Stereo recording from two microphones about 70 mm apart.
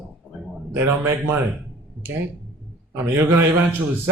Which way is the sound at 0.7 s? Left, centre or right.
Right.